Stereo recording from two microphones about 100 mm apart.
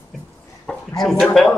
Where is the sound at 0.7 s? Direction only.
10° left (ahead or behind).